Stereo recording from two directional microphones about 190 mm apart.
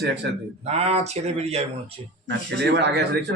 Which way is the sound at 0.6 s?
35° right (ahead or behind).